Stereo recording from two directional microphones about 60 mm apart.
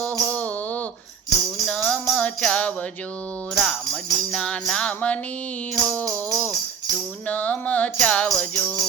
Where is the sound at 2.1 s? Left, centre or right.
Centre.